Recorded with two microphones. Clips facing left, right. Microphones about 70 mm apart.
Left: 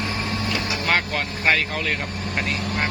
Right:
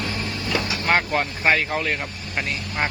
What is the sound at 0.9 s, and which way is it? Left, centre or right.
Speech, centre.